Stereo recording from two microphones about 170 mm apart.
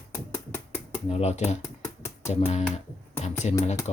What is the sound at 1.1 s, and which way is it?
Speech, 40° left (ahead or behind).